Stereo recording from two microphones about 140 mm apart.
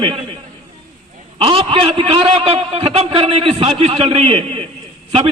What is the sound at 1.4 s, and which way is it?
A man's voice, 40° right (ahead or behind).